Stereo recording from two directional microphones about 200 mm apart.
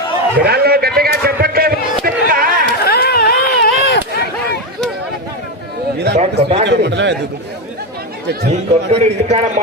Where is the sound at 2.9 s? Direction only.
50° left (ahead or behind).